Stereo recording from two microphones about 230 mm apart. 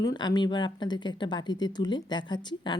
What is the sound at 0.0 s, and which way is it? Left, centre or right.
A woman's voice, centre.